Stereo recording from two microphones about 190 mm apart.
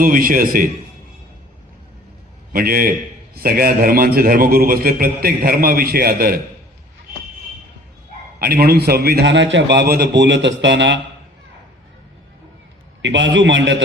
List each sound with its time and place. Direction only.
0.0 s a man's voice: 45° right (ahead or behind)
2.5 s a man's voice: 50° right (ahead or behind)
8.4 s a man's voice: 55° right (ahead or behind); by 11.0 s 70° right (ahead or behind)
13.0 s a man's voice: 70° right (ahead or behind)